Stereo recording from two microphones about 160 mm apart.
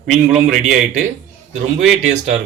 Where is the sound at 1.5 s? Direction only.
45° right (ahead or behind).